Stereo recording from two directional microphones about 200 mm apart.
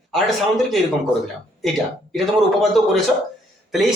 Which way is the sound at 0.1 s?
Centre (ahead or behind).